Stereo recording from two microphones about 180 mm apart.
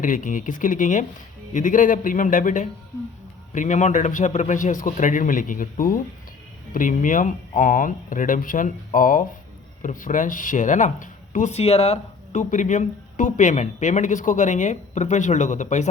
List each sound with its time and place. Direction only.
0.0 s speech: 50° left (ahead or behind)